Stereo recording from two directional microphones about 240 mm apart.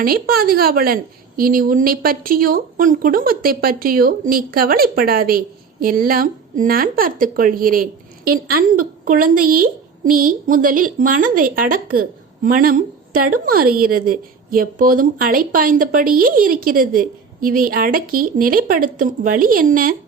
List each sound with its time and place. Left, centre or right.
0.0 s speech: right